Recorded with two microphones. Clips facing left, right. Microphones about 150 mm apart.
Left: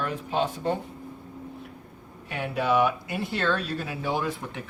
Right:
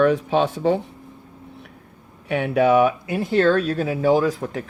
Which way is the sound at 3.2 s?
45° right (ahead or behind).